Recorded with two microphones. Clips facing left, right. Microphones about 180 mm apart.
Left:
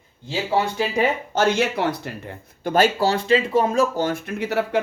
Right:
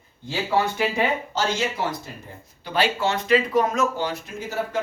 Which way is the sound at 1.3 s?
65° left (ahead or behind).